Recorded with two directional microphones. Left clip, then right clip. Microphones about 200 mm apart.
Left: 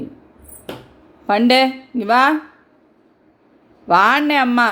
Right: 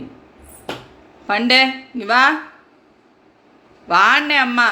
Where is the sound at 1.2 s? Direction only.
50° left (ahead or behind).